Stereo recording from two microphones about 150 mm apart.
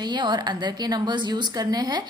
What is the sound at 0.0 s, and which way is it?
A woman's voice, 30° right (ahead or behind).